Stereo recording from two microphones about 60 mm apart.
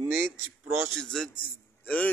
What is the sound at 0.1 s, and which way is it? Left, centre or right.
Speech, right.